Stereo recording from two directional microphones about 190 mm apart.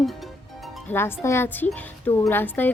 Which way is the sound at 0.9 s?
10° left (ahead or behind).